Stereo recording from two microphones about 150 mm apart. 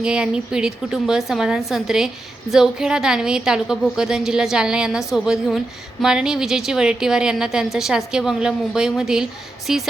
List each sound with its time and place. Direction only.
0.0 s a woman's voice: 5° right (ahead or behind)